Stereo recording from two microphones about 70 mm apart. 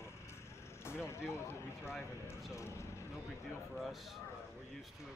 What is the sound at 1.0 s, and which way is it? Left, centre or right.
Speech, left.